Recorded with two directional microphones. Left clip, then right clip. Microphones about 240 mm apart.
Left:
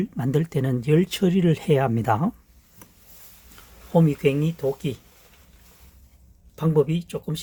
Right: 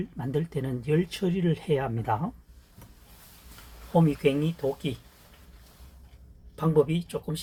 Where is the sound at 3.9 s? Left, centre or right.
Left.